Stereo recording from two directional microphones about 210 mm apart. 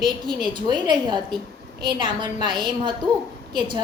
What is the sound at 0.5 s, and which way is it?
A woman's voice, 20° right (ahead or behind).